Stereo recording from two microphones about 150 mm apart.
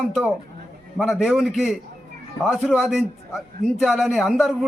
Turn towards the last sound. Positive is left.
turn(degrees=0)  # may be behind; listen again after turning